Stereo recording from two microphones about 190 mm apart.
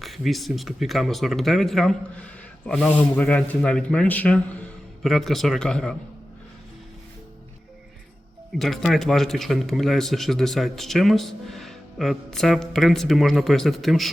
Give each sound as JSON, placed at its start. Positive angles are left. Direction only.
{"t": 0.0, "sound": "speech", "side_deg": 0}
{"t": 8.5, "sound": "speech", "side_deg": 0}